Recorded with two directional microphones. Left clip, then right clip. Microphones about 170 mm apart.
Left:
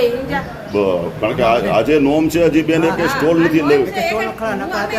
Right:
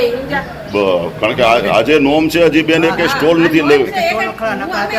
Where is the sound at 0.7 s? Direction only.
5° left (ahead or behind).